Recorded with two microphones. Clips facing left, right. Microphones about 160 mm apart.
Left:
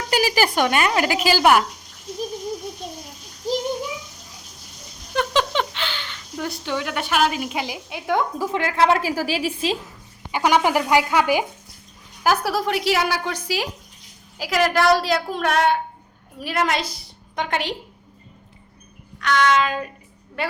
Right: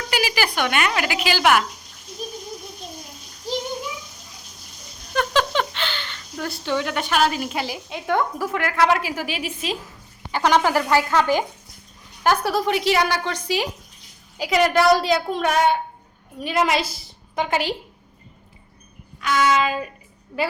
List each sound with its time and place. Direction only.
0.1 s speech: 40° left (ahead or behind)
5.1 s speech: 20° left (ahead or behind)
8.5 s speech: 25° left (ahead or behind)
10.3 s a woman's voice: 10° left (ahead or behind); by 17.7 s 5° right (ahead or behind)
19.2 s child singing: 5° right (ahead or behind)
20.4 s a woman's voice: 5° right (ahead or behind)